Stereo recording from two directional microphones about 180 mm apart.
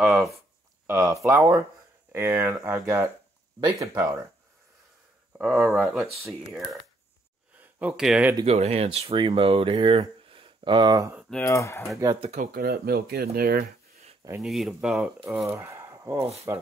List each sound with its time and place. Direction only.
0.0 s speech: 10° right (ahead or behind)
5.4 s speech: 5° right (ahead or behind)
8.5 s speech: 35° right (ahead or behind)
11.4 s speech: 15° left (ahead or behind)
12.2 s speech: 45° right (ahead or behind)
14.4 s speech: centre (ahead or behind)
15.2 s speech: 15° right (ahead or behind)